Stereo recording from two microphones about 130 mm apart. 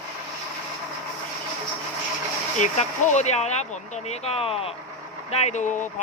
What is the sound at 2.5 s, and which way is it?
Speech, 70° left (ahead or behind).